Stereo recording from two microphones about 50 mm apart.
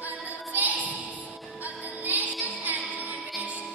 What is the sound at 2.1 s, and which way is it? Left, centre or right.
Music, right.